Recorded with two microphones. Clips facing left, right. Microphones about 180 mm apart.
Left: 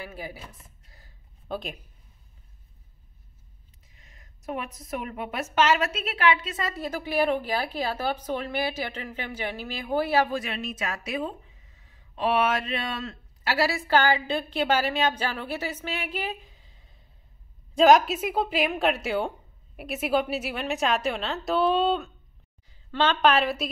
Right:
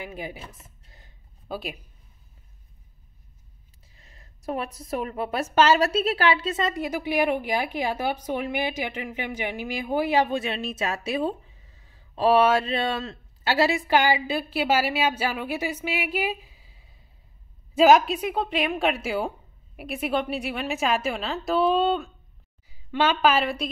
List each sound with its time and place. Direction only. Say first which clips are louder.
0.0 s a woman's voice: right 3 dB; 15° right (ahead or behind)
0.8 s a sound: right 2 dB; 25° right (ahead or behind)
1.5 s a woman's voice: even; 5° right (ahead or behind)
3.9 s a woman's voice: right 3 dB; 30° right (ahead or behind)
6.7 s a woman's voice: right 3 dB; 15° right (ahead or behind)
22.7 s a woman's voice: right 1 dB; 10° right (ahead or behind)